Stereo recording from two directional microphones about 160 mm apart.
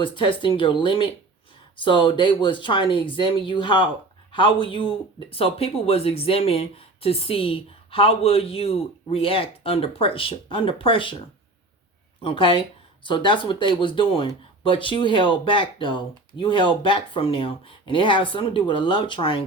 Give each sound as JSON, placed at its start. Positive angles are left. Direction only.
{"t": 0.0, "sound": "speech", "side_deg": 30}
{"t": 12.2, "sound": "speech", "side_deg": 35}